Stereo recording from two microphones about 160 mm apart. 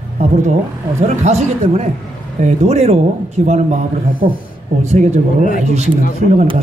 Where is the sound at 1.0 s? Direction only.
45° right (ahead or behind).